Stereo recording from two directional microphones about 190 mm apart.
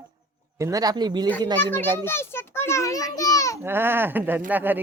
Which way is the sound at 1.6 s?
10° left (ahead or behind).